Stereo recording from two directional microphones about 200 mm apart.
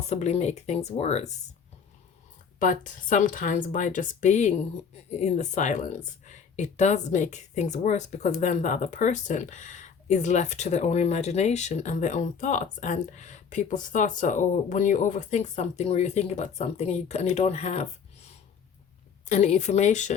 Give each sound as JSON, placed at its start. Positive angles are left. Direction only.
{"t": 0.0, "sound": "speech", "side_deg": 35}
{"t": 2.6, "sound": "speech", "side_deg": 40}
{"t": 19.3, "sound": "speech", "side_deg": 35}